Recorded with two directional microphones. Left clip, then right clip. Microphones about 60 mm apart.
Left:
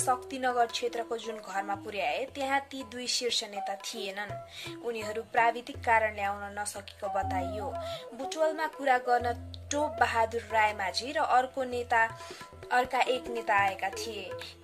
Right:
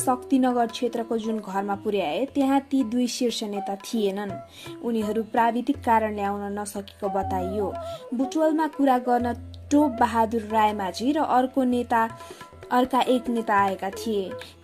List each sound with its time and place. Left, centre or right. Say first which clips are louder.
0.0 s speech: right 6 dB; right
5.4 s speech: right 3 dB; right
7.0 s speech: right 5 dB; centre
7.3 s speech: right 6 dB; right
10.0 s speech: right 5 dB; right
10.8 s speech: right 5 dB; right
13.6 s speech: right 5 dB; centre
14.0 s speech: right 10 dB; right